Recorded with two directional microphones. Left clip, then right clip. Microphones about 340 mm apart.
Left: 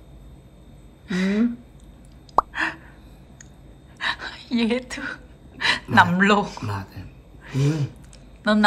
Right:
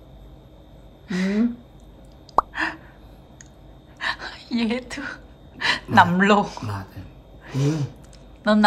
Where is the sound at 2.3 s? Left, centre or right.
Centre.